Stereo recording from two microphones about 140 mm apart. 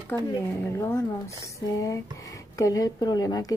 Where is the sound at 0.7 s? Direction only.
20° left (ahead or behind).